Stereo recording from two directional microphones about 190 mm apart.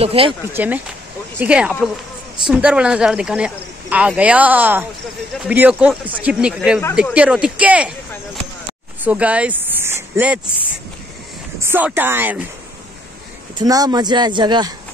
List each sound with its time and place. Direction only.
0.0 s speech: 30° right (ahead or behind)
0.5 s speech: 10° right (ahead or behind)
9.0 s speech: 5° right (ahead or behind)
11.6 s speech: 10° right (ahead or behind)
13.6 s speech: 20° right (ahead or behind)